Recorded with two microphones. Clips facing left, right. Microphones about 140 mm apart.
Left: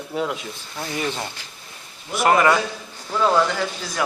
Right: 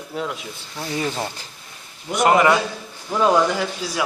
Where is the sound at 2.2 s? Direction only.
20° right (ahead or behind).